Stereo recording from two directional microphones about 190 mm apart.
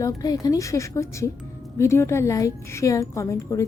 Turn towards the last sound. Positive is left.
turn(degrees=15)  # may be behind; listen again after turning